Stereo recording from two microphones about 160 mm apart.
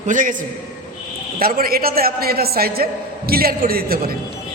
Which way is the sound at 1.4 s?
65° right (ahead or behind).